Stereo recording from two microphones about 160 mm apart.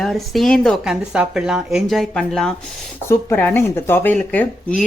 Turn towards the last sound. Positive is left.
turn(degrees=10)  # may be behind; listen again after turning